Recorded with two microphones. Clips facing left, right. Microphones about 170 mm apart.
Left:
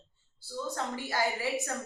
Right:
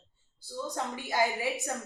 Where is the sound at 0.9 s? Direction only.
20° right (ahead or behind).